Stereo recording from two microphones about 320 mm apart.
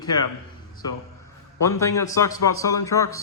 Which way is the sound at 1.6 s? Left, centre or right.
Centre.